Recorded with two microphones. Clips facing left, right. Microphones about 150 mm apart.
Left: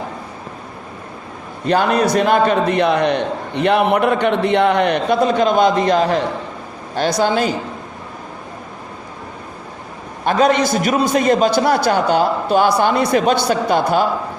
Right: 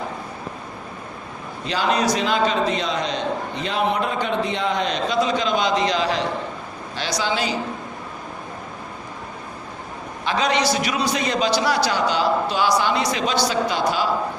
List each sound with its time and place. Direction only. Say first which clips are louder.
1.6 s a man's voice: left 6 dB; 55° left (ahead or behind)
10.2 s a man's voice: left 6 dB; 50° left (ahead or behind)